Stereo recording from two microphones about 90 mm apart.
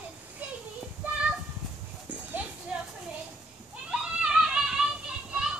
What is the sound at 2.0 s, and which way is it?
Horse, 15° right (ahead or behind).